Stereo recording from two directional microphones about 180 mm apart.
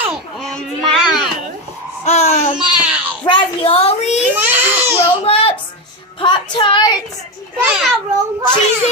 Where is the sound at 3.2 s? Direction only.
30° left (ahead or behind).